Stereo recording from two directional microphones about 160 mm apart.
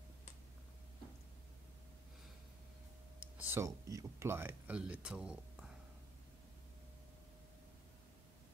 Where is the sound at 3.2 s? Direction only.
15° right (ahead or behind).